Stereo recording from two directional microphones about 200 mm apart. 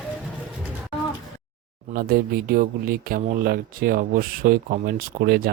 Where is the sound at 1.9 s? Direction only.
50° right (ahead or behind).